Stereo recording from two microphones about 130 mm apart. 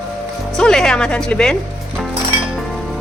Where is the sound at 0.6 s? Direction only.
5° left (ahead or behind).